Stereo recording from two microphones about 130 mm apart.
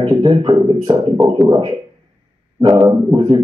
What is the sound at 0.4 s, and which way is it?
A man's voice, 35° right (ahead or behind).